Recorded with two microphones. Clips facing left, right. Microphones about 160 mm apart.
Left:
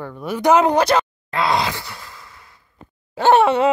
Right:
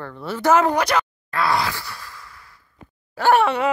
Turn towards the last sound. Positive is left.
turn(degrees=25)  # may be behind; listen again after turning